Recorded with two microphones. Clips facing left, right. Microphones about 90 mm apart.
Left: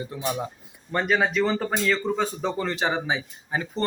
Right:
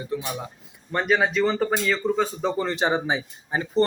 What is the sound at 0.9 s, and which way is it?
Speech, centre (ahead or behind).